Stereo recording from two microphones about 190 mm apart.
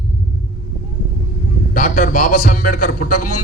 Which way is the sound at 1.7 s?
45° left (ahead or behind).